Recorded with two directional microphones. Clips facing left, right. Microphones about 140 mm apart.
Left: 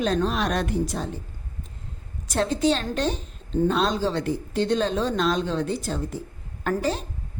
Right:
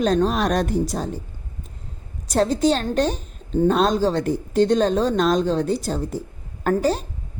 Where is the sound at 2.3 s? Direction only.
40° right (ahead or behind).